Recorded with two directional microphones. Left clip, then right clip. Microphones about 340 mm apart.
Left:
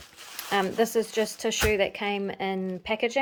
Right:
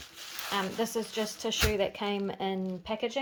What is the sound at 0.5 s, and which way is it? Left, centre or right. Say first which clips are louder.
Speech: left 8 dB; centre.